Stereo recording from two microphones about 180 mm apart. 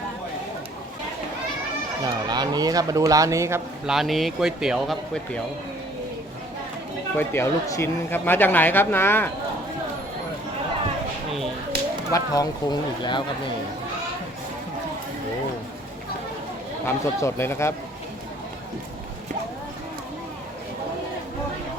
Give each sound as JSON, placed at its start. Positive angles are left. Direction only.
{"t": 2.0, "sound": "speech", "side_deg": -25}
{"t": 3.8, "sound": "speech", "side_deg": 0}
{"t": 7.2, "sound": "a man's voice", "side_deg": 15}
{"t": 12.1, "sound": "speech", "side_deg": 20}
{"t": 16.8, "sound": "a man's voice", "side_deg": 15}